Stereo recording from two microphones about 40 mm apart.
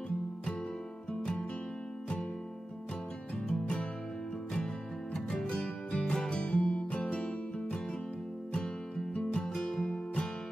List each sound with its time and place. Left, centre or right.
5.1 s music: centre
5.5 s music: left
9.1 s music: left
9.5 s music: centre